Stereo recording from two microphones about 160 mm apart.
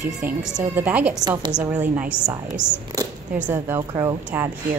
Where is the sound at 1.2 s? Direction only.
25° right (ahead or behind).